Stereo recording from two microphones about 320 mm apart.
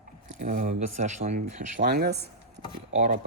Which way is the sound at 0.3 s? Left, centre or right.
Right.